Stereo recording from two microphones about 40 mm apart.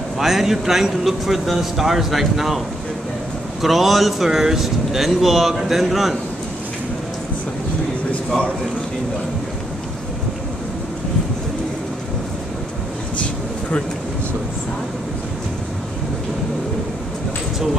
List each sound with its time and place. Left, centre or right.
0.2 s a man's voice: centre
3.6 s speech: centre
13.2 s air conditioning: left